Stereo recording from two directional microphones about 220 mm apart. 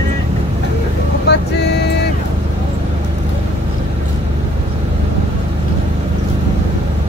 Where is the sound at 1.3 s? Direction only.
50° left (ahead or behind).